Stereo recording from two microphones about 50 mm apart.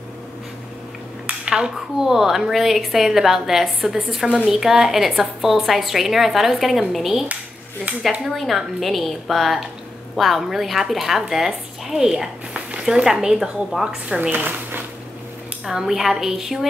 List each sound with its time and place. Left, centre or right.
1.5 s a woman's voice: centre
14.0 s speech: right
14.3 s speech: right
15.6 s a woman's voice: centre